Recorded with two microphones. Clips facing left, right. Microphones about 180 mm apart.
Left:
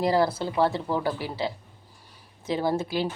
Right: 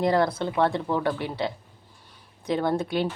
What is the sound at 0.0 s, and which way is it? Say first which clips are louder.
Speech: right 1 dB; 5° left (ahead or behind).